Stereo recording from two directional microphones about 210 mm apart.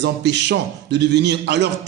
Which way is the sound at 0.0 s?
55° right (ahead or behind).